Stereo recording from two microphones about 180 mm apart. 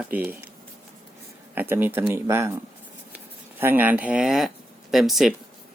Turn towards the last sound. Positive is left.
turn(degrees=0)  # may be behind; listen again after turning